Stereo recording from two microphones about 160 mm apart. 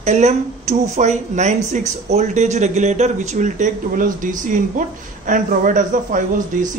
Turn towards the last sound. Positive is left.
turn(degrees=-55)  # may be behind; listen again after turning